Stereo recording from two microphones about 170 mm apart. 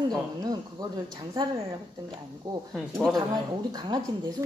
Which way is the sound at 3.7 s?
25° right (ahead or behind).